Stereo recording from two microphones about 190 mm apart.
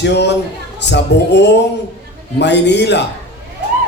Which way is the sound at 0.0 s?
65° left (ahead or behind).